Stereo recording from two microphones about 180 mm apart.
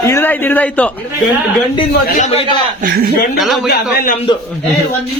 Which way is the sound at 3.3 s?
Centre (ahead or behind).